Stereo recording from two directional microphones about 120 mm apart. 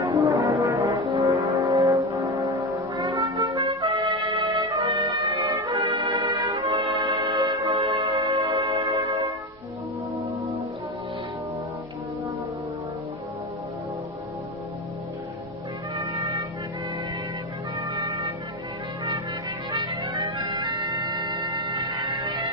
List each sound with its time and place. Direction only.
0.0 s brass instrument: 25° right (ahead or behind)
2.0 s foghorn: 25° right (ahead or behind)
3.0 s trumpet: 40° right (ahead or behind)
5.8 s music: 40° right (ahead or behind)
8.5 s church bell: 40° right (ahead or behind)
16.0 s music: 40° right (ahead or behind)
17.7 s music: 40° right (ahead or behind)
19.7 s bagpipes: 40° right (ahead or behind)